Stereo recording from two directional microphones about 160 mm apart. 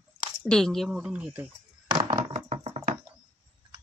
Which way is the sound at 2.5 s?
40° right (ahead or behind).